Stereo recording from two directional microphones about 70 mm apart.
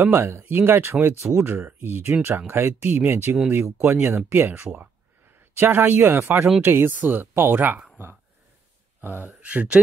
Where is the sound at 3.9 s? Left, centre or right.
Right.